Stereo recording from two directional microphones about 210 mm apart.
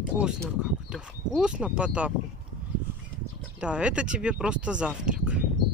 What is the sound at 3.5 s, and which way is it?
Speech, 5° right (ahead or behind).